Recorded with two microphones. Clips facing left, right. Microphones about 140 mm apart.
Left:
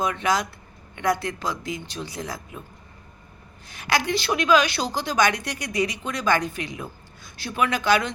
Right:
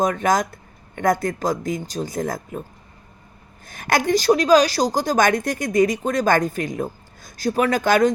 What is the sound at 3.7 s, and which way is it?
A woman's voice, 50° right (ahead or behind).